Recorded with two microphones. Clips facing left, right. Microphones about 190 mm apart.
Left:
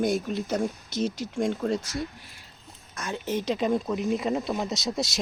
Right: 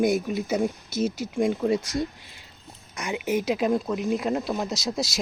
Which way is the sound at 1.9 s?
20° right (ahead or behind).